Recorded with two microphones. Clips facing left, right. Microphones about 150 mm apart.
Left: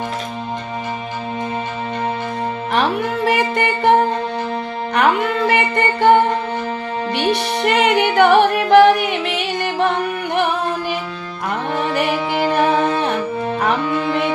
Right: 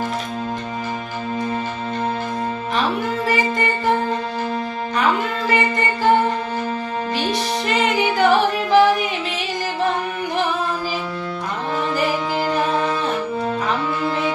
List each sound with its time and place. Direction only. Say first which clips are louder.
3.2 s music: left 4 dB; 65° left (ahead or behind)
5.0 s music: left 5 dB; 65° left (ahead or behind)
7.2 s music: left 6 dB; 65° left (ahead or behind)
11.9 s music: left 3 dB; 65° left (ahead or behind)